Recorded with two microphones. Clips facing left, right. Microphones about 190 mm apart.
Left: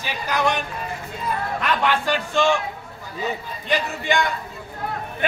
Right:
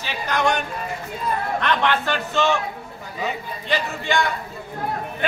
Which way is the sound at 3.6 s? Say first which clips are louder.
Left 1 dB; 15° left (ahead or behind).